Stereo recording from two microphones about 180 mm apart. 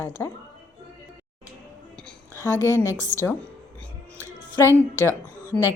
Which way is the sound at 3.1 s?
45° right (ahead or behind).